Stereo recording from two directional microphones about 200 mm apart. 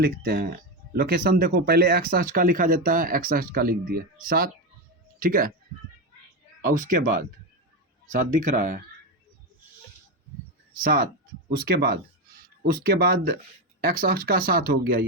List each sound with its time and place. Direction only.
0.0 s speech: 45° right (ahead or behind)
6.7 s speech: 40° right (ahead or behind)
10.8 s speech: 45° right (ahead or behind)